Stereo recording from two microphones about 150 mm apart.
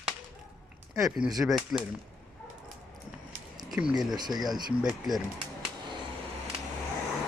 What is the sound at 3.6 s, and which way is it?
Speech, 5° right (ahead or behind).